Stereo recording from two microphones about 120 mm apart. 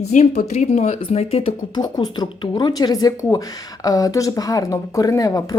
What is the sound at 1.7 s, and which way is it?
Speech, 35° left (ahead or behind).